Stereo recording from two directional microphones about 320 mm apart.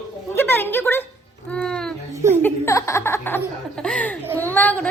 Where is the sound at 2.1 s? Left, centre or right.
Centre.